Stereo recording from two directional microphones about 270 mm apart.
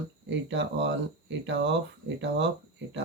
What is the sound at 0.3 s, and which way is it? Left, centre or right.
Speech, right.